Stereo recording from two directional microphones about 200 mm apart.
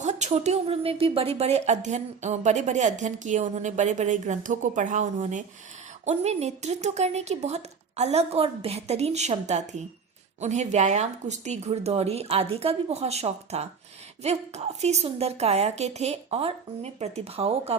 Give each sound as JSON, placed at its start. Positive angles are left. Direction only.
{"t": 0.0, "sound": "a woman's voice", "side_deg": -35}